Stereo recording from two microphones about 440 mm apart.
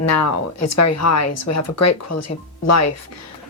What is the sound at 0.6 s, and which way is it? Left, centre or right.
Speech, left.